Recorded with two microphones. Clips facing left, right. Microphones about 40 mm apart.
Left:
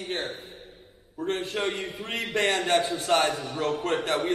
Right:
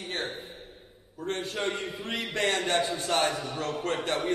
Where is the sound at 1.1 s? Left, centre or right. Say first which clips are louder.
Left 3 dB; left.